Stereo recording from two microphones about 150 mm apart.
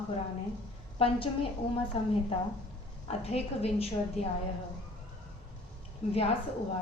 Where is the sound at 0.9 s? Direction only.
40° left (ahead or behind).